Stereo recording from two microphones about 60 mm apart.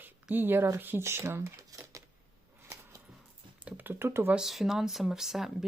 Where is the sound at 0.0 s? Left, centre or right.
Right.